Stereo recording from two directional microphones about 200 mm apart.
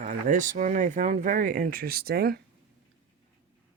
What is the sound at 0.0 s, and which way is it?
Speech, 40° right (ahead or behind).